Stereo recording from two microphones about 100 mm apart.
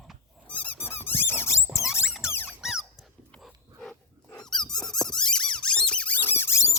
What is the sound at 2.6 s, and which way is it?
Squeak, 5° right (ahead or behind).